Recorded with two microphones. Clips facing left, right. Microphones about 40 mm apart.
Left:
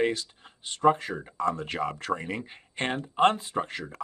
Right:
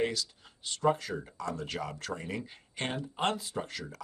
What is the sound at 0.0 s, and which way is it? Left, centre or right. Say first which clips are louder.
Speech: left 5 dB; left.